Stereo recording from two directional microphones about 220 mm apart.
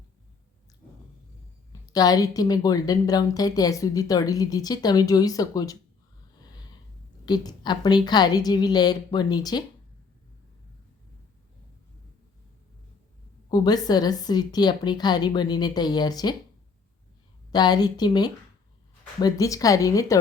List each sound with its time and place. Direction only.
1.9 s a woman's voice: 15° left (ahead or behind)
7.3 s a woman's voice: 20° left (ahead or behind)
13.5 s a woman's voice: 20° left (ahead or behind)
17.5 s a woman's voice: 20° left (ahead or behind)